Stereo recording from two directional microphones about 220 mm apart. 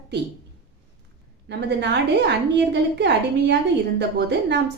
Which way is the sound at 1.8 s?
50° right (ahead or behind).